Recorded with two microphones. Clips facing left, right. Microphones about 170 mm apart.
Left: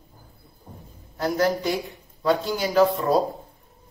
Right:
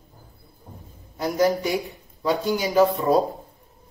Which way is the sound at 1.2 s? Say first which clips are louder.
Right 1 dB; 10° right (ahead or behind).